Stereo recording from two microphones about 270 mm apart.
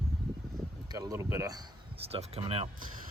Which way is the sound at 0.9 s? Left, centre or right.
Centre.